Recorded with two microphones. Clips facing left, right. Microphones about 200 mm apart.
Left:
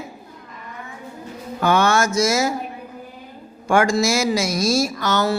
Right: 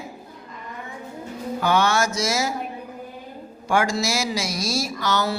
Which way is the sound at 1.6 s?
50° left (ahead or behind).